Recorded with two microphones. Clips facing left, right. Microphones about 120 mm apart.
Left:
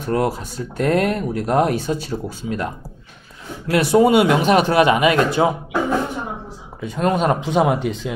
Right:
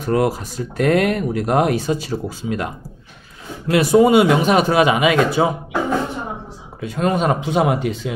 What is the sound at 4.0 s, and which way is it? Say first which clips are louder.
Speech: right 1 dB; 15° right (ahead or behind).